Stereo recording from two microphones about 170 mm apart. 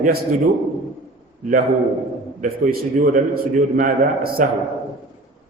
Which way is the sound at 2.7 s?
55° right (ahead or behind).